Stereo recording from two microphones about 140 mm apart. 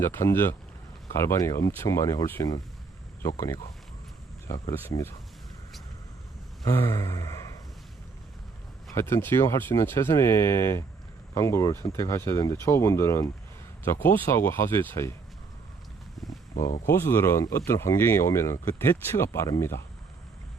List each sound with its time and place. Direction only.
0.0 s speech: 20° left (ahead or behind)
4.7 s speech: 20° left (ahead or behind)
6.7 s speech: 20° left (ahead or behind)
9.0 s speech: 20° left (ahead or behind)
16.2 s wild animals: centre (ahead or behind)
16.6 s speech: 85° left
16.8 s speech: 20° left (ahead or behind)